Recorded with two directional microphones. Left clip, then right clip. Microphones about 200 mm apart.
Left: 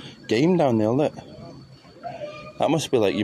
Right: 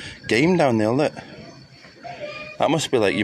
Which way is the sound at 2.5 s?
5° left (ahead or behind).